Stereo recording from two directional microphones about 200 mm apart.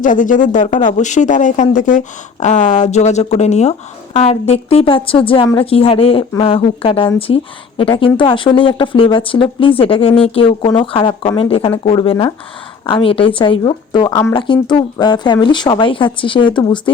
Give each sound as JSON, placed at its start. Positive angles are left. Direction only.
{"t": 0.0, "sound": "speech", "side_deg": 40}